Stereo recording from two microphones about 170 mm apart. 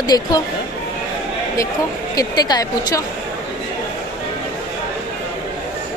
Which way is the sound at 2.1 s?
20° left (ahead or behind).